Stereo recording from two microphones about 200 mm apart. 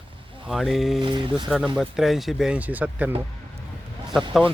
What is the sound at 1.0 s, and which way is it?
Speech, 25° right (ahead or behind).